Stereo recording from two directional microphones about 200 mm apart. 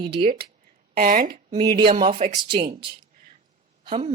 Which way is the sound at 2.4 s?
25° right (ahead or behind).